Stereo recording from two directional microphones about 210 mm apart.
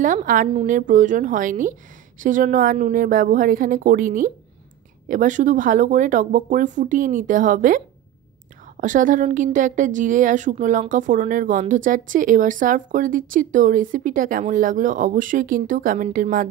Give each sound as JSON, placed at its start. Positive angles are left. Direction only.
{"t": 0.0, "sound": "a woman's voice", "side_deg": -40}